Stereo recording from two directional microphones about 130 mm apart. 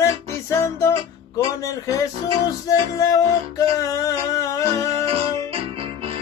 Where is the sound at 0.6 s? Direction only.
20° left (ahead or behind).